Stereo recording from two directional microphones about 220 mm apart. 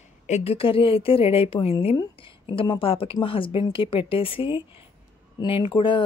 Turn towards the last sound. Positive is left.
turn(degrees=20)  # may be behind; listen again after turning